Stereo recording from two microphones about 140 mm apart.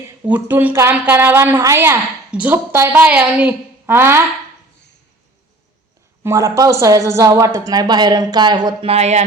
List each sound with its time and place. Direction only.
0.3 s a woman's voice: 15° right (ahead or behind)
6.2 s speech: 20° right (ahead or behind)
8.9 s speech: 50° right (ahead or behind)